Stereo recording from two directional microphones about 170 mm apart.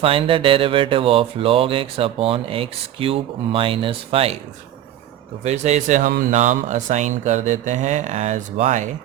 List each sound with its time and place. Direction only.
0.0 s music: 30° right (ahead or behind)
5.4 s music: 40° right (ahead or behind)
6.3 s speech: 45° right (ahead or behind)